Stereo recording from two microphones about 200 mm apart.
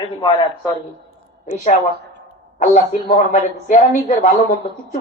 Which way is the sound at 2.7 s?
35° left (ahead or behind).